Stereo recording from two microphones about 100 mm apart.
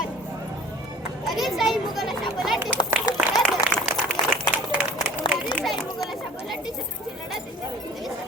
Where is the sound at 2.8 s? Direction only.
40° left (ahead or behind).